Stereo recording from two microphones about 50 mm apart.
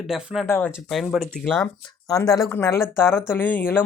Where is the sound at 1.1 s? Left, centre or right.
Centre.